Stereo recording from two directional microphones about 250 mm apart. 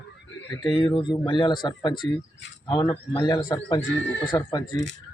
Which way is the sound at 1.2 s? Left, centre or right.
Centre.